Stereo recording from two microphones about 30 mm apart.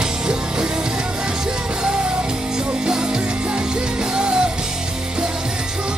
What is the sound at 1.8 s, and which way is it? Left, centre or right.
Music, right.